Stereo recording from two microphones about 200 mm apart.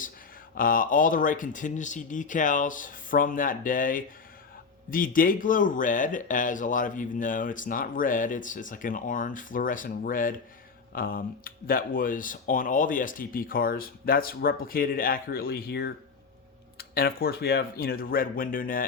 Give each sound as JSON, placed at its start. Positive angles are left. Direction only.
{"t": 0.5, "sound": "speech", "side_deg": 45}